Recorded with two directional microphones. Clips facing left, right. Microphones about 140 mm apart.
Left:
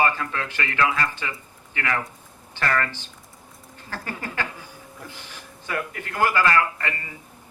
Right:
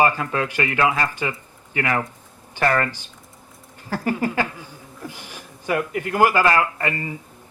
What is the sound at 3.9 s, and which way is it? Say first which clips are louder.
A man's voice: right 9 dB; 15° right (ahead or behind).